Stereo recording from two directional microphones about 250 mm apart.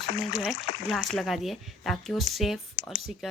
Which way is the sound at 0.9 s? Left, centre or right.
Centre.